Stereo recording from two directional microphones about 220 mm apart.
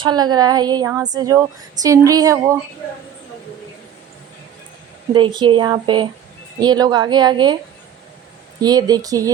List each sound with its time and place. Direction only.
0.0 s speech: 20° right (ahead or behind)
5.1 s a woman's voice: 20° right (ahead or behind)
8.6 s speech: 15° right (ahead or behind)